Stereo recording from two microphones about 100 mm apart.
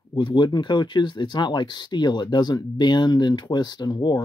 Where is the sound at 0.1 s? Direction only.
55° left (ahead or behind).